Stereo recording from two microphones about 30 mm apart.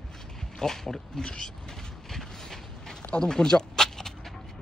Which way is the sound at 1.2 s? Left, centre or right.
Left.